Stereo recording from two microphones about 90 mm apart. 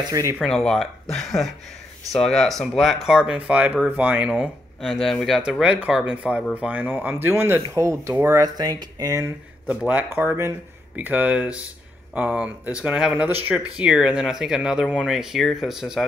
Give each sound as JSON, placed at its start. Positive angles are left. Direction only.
{"t": 0.1, "sound": "speech", "side_deg": -35}
{"t": 0.4, "sound": "speech", "side_deg": 0}
{"t": 5.0, "sound": "speech", "side_deg": 0}
{"t": 5.6, "sound": "speech", "side_deg": -10}
{"t": 8.4, "sound": "speech", "side_deg": -45}
{"t": 9.7, "sound": "speech", "side_deg": -15}